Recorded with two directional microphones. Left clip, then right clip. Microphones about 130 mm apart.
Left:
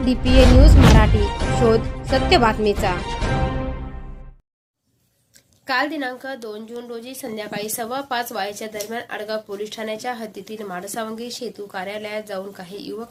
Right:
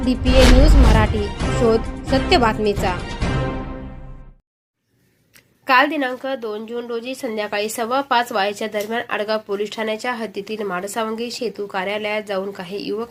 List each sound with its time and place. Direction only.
0.0 s speech: centre (ahead or behind)
5.6 s a woman's voice: 20° right (ahead or behind)